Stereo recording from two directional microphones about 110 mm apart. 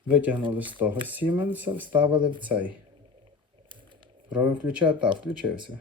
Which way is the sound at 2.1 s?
45° right (ahead or behind).